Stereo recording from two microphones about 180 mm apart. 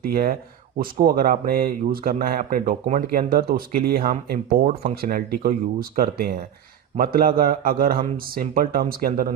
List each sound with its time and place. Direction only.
0.0 s a man's voice: 55° right (ahead or behind)